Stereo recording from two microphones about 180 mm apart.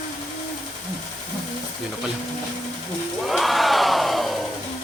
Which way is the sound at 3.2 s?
Centre (ahead or behind).